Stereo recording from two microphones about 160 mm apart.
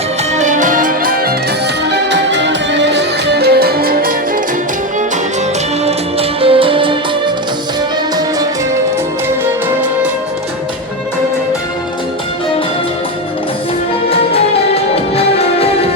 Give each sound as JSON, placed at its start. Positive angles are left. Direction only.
{"t": 0.3, "sound": "music", "side_deg": -50}
{"t": 1.9, "sound": "music", "side_deg": -90}
{"t": 5.8, "sound": "music", "side_deg": -35}
{"t": 15.1, "sound": "music", "side_deg": 40}